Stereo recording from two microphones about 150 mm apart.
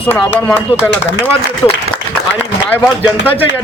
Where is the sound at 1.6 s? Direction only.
25° left (ahead or behind).